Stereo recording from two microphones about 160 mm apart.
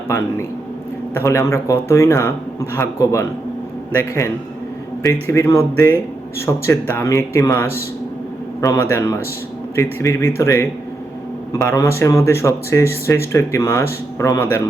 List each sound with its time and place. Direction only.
0.1 s speech: 15° left (ahead or behind)